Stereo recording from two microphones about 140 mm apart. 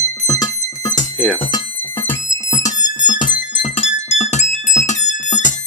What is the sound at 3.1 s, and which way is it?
Music, 70° left (ahead or behind).